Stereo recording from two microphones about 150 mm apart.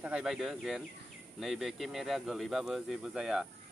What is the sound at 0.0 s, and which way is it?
Speech, 5° right (ahead or behind).